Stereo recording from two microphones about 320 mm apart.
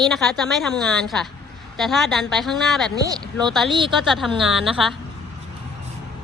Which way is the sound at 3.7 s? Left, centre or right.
Centre.